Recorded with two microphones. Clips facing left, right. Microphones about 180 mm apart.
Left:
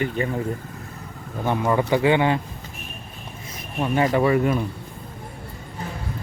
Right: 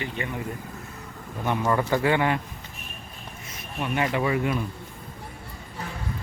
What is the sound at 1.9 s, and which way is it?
Speech, 20° left (ahead or behind).